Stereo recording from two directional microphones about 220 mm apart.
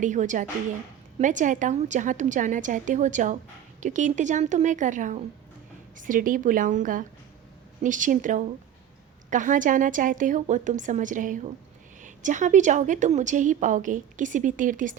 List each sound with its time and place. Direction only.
0.0 s a woman's voice: 35° right (ahead or behind)